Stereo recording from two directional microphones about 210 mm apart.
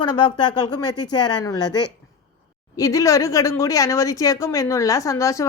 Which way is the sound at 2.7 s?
15° left (ahead or behind).